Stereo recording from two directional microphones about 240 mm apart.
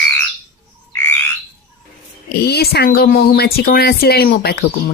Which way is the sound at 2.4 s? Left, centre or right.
Left.